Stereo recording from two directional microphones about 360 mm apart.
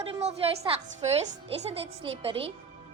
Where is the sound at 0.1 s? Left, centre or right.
Centre.